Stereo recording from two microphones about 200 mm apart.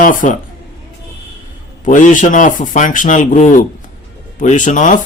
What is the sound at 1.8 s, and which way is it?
Speech, 40° left (ahead or behind).